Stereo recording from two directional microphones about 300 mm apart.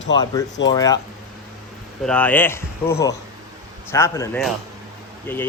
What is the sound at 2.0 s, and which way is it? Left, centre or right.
A man's voice, centre.